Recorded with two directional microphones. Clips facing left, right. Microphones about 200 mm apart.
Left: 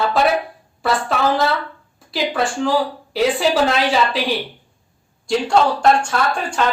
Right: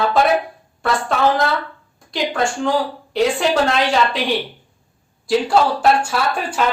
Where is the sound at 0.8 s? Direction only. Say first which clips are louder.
Right 1 dB; centre (ahead or behind).